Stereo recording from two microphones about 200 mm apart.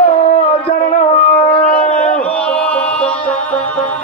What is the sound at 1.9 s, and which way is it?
Music, 5° left (ahead or behind).